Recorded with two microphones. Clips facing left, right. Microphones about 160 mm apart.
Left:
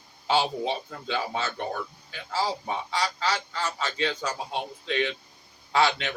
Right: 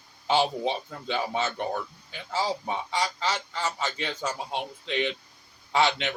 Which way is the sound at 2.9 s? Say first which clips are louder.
Left 1 dB; 20° right (ahead or behind).